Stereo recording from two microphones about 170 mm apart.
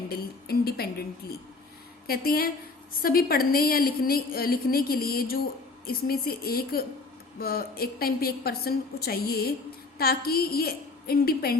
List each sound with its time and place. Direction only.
0.1 s a woman's voice: 65° left (ahead or behind)